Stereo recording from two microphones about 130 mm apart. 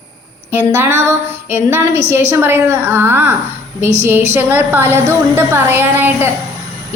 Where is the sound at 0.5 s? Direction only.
20° right (ahead or behind).